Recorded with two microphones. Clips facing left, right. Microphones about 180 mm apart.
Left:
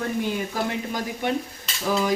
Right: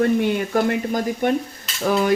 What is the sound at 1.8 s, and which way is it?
Speech, 60° right (ahead or behind).